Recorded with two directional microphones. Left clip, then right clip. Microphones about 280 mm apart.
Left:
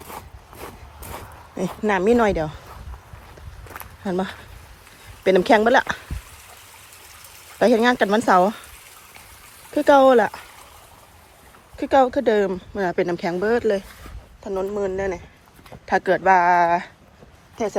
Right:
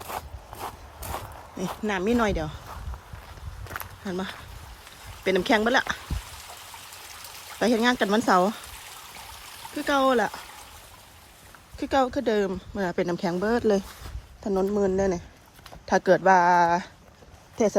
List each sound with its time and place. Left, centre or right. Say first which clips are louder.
1.1 s speech: left 2 dB; centre
3.7 s walk: left 5 dB; centre
5.2 s speech: left 7 dB; centre
7.6 s speech: left 6 dB; centre
9.7 s speech: left 9 dB; centre
11.8 s speech: left 7 dB; centre